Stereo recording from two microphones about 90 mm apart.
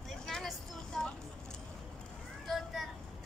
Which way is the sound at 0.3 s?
5° left (ahead or behind).